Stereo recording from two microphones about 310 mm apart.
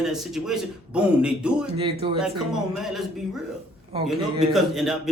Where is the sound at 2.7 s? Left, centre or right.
Centre.